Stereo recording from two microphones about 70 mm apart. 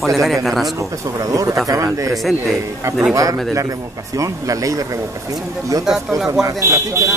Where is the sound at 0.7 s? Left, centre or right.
Right.